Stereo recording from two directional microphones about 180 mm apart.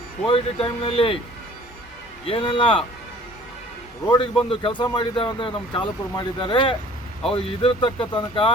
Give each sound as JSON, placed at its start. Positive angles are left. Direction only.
{"t": 0.3, "sound": "speech", "side_deg": 30}
{"t": 2.2, "sound": "speech", "side_deg": 30}
{"t": 4.0, "sound": "speech", "side_deg": 25}